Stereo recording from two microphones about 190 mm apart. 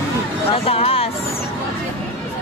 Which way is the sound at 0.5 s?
30° left (ahead or behind).